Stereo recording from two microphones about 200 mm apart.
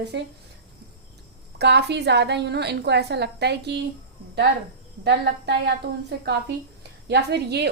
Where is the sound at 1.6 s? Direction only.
55° right (ahead or behind).